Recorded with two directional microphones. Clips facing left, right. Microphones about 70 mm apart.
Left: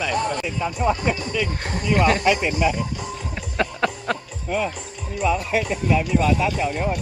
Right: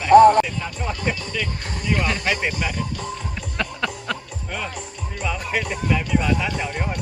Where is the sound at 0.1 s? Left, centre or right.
Right.